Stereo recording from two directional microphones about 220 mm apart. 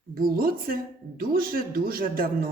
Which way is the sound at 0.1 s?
40° right (ahead or behind).